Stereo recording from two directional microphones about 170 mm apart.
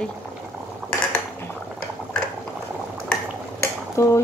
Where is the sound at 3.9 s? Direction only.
15° left (ahead or behind).